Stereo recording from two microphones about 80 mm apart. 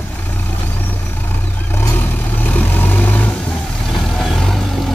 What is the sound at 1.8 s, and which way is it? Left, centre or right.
Vehicle, left.